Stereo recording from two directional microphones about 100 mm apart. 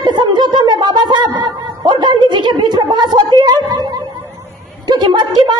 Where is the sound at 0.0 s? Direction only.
50° right (ahead or behind).